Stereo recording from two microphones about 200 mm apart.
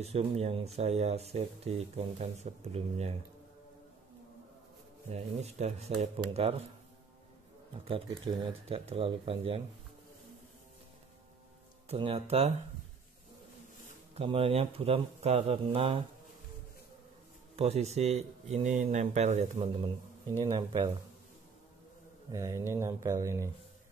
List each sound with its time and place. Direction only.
0.0 s speech: 30° right (ahead or behind)
5.1 s speech: 35° right (ahead or behind)
8.6 s speech: 30° right (ahead or behind)
11.9 s speech: 30° right (ahead or behind)
14.1 s speech: 30° right (ahead or behind)
17.6 s speech: 30° right (ahead or behind)
22.3 s speech: 15° right (ahead or behind)